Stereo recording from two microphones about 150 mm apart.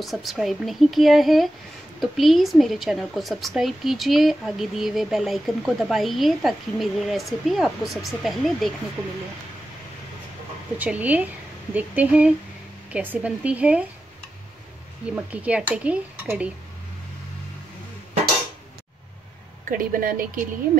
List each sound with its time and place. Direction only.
0.0 s a woman's voice: centre (ahead or behind)
10.8 s speech: 10° right (ahead or behind)
15.1 s speech: 10° right (ahead or behind)
19.7 s a woman's voice: 70° right (ahead or behind)